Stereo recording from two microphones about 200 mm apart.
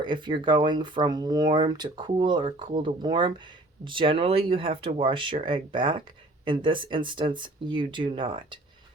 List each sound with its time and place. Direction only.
0.0 s speech: 25° right (ahead or behind)